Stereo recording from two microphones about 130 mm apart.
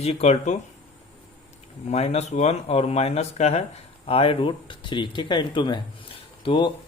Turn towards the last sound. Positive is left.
turn(degrees=35)  # may be behind; listen again after turning